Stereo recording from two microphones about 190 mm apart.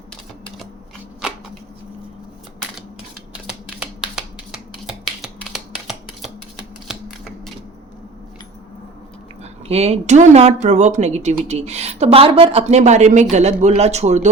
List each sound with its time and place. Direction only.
0.1 s typewriter: centre (ahead or behind)
3.4 s a sound: 5° right (ahead or behind)
9.4 s speech: 35° right (ahead or behind)